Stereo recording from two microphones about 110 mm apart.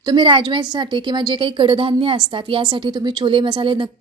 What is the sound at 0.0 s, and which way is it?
A woman's voice, 45° right (ahead or behind).